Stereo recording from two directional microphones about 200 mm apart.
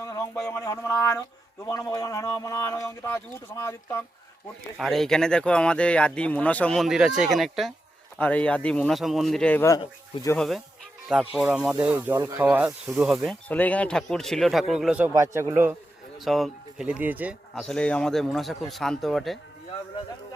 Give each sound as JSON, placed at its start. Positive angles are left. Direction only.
{"t": 0.0, "sound": "speech", "side_deg": 15}
{"t": 4.8, "sound": "speech", "side_deg": 0}
{"t": 10.3, "sound": "a man's voice", "side_deg": 0}
{"t": 16.2, "sound": "speech", "side_deg": 0}
{"t": 17.6, "sound": "speech", "side_deg": 5}